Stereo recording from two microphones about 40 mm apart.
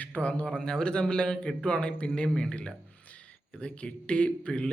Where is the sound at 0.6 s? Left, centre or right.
Left.